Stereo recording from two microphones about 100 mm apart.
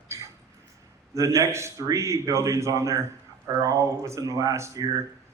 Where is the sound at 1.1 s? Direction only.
30° right (ahead or behind).